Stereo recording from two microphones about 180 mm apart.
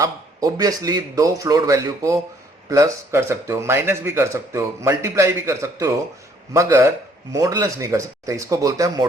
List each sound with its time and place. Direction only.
0.0 s a man's voice: 20° right (ahead or behind)